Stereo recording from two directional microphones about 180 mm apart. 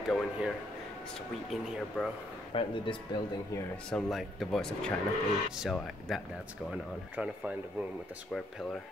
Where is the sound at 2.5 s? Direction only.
30° left (ahead or behind).